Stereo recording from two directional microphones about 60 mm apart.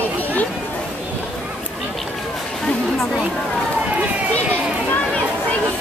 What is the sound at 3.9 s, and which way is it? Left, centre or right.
Run, right.